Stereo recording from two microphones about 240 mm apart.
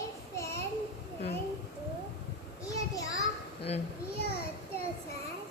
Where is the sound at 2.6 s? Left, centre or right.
Centre.